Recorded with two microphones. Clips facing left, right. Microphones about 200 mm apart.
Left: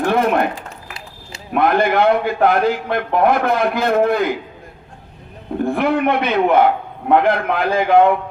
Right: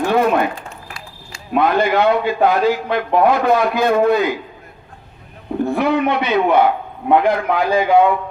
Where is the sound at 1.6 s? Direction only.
55° left (ahead or behind).